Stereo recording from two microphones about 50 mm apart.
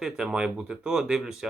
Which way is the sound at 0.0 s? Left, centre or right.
Centre.